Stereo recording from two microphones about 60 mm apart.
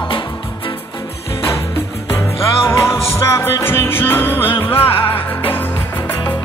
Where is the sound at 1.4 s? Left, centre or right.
Left.